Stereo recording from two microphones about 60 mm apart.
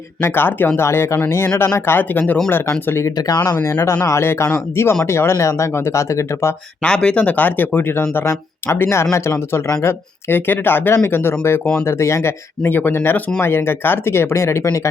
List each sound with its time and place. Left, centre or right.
0.2 s speech: left
3.2 s speech: left
3.6 s a man's voice: left
6.8 s speech: centre; by 11.6 s left
11.9 s speech: left
12.6 s speech: left